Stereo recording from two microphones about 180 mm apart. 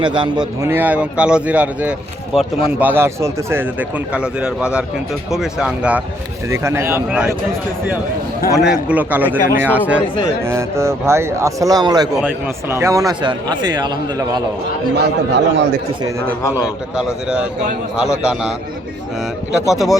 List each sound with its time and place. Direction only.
0.0 s a man's voice: 25° right (ahead or behind)
0.6 s a man's voice: 10° right (ahead or behind)
8.5 s speech: 5° right (ahead or behind); by 12.0 s 20° right (ahead or behind)
12.1 s a man's voice: 10° right (ahead or behind)
14.9 s a man's voice: 70° right (ahead or behind)
16.6 s a man's voice: 5° right (ahead or behind)
19.5 s a man's voice: centre (ahead or behind)